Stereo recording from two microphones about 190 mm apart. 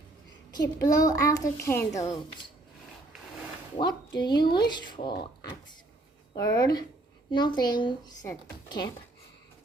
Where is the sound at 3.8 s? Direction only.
25° left (ahead or behind).